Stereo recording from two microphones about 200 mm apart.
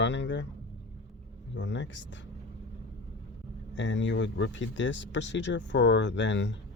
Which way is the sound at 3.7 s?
65° left (ahead or behind).